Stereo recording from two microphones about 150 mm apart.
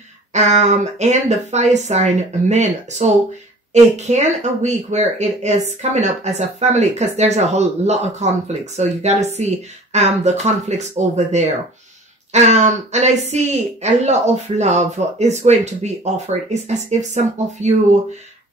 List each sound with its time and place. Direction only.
0.3 s speech: 50° right (ahead or behind)